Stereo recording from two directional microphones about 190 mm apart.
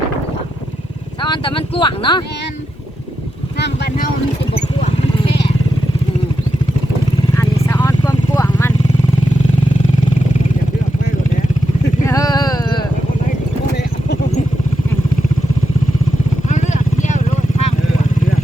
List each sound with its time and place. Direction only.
1.2 s speech: 25° left (ahead or behind)
3.6 s speech: 60° left (ahead or behind)
4.8 s vehicle: 35° left (ahead or behind)
7.3 s vehicle: 10° left (ahead or behind)
12.0 s a sound: 15° left (ahead or behind)
16.5 s vehicle: 40° left (ahead or behind)